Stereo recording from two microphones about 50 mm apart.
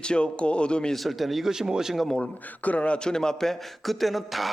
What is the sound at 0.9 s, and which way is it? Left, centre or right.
A man's voice, centre.